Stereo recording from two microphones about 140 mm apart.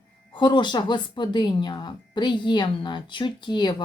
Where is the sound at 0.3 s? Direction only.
35° left (ahead or behind).